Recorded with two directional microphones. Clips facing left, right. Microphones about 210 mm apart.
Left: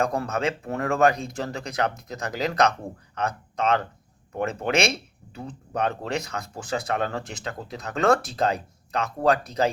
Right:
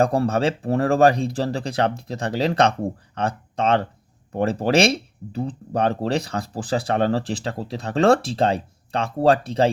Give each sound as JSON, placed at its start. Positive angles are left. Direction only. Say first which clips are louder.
{"t": 0.0, "sound": "speech", "louder": "right 6 dB", "side_deg": -30}